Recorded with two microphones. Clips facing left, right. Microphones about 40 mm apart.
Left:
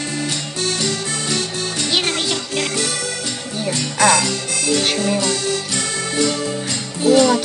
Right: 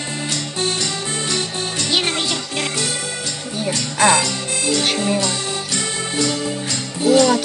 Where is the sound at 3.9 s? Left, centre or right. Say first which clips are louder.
Even; centre.